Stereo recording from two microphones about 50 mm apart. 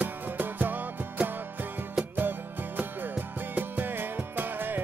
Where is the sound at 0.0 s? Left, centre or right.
Right.